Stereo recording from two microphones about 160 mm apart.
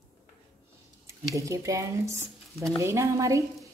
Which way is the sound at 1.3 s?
20° right (ahead or behind).